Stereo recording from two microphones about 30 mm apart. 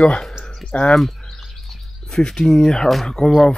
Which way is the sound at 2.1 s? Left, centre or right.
Left.